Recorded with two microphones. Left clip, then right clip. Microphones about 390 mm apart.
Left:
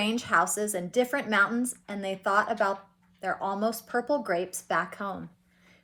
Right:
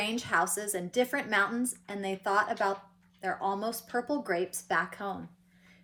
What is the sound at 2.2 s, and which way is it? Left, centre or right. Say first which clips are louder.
Speech: left 3 dB; left.